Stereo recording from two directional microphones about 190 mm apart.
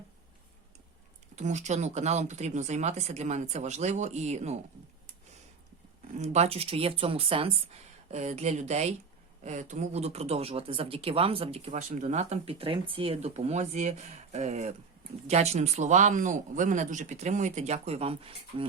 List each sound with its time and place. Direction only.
1.4 s speech: 40° right (ahead or behind)
6.1 s speech: 35° right (ahead or behind)